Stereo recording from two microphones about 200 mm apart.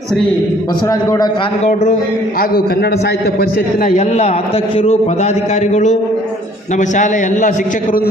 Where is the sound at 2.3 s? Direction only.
50° left (ahead or behind).